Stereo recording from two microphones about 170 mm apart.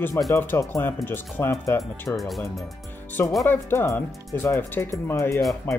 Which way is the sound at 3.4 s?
15° left (ahead or behind).